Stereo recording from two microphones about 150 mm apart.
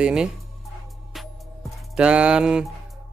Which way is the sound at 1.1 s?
Centre (ahead or behind).